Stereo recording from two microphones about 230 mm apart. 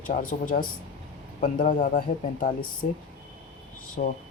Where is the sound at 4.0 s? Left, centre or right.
Left.